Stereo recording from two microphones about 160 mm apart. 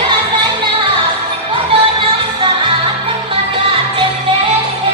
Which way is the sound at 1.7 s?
35° right (ahead or behind).